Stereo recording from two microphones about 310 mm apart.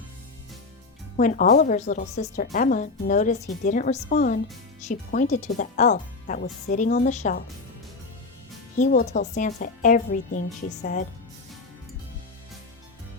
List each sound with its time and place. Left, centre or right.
1.1 s a woman's voice: left
8.8 s a woman's voice: left